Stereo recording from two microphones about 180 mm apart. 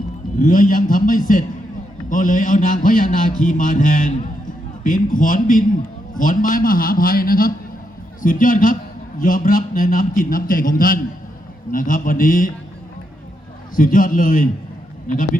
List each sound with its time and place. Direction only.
0.3 s a man's voice: 45° left (ahead or behind)
13.7 s a man's voice: 50° left (ahead or behind)